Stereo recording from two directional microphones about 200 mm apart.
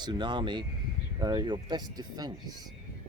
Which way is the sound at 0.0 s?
20° right (ahead or behind).